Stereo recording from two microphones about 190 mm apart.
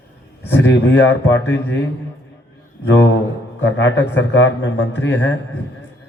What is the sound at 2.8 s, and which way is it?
A man's voice, 70° left (ahead or behind).